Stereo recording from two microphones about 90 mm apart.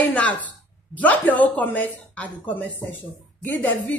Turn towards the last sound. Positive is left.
turn(degrees=20)  # may be behind; listen again after turning